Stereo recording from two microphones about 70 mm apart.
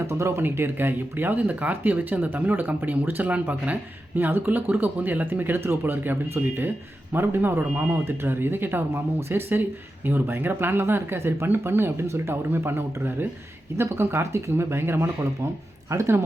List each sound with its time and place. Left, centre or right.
0.1 s speech: right